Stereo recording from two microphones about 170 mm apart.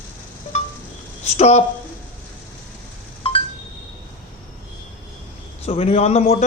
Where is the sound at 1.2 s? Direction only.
40° left (ahead or behind).